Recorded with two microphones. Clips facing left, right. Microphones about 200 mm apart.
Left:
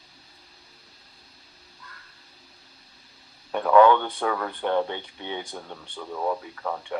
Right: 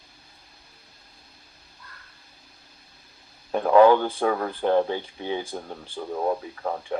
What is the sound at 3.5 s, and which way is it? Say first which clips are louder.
Speech: right 1 dB; 30° right (ahead or behind).